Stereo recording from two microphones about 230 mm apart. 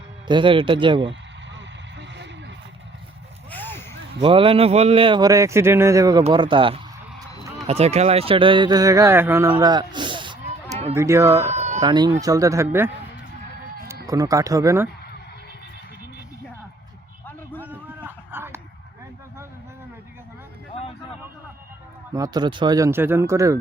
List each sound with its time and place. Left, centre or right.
0.3 s speech: right
3.5 s a sound: centre
4.2 s speech: right
10.9 s speech: centre
11.4 s a sound: right
11.8 s speech: centre
14.1 s speech: centre
17.6 s a sound: centre
22.1 s speech: centre